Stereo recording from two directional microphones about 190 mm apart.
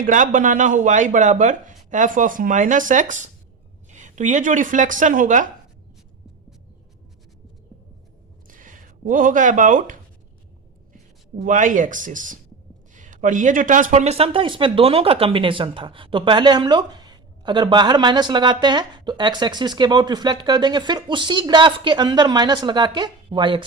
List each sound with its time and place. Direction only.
0.0 s a woman's voice: 45° right (ahead or behind)
8.4 s a sound: 45° right (ahead or behind)
11.4 s speech: 40° right (ahead or behind); by 23.6 s 25° right (ahead or behind)